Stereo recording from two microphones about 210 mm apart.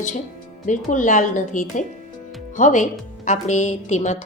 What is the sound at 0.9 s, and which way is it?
Speech, 35° left (ahead or behind).